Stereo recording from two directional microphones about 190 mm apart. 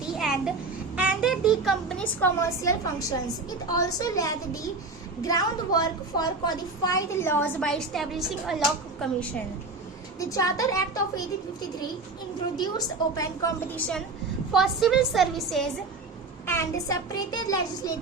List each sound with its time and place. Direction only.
0.1 s a sound: 5° right (ahead or behind)
0.9 s a woman's voice: 5° right (ahead or behind)
10.2 s a child's voice: 20° left (ahead or behind)
12.5 s a child's voice: 20° left (ahead or behind)
13.7 s a woman's voice: 5° left (ahead or behind)
16.5 s a child's voice: 15° left (ahead or behind)